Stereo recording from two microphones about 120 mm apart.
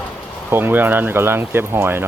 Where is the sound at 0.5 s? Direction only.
15° right (ahead or behind).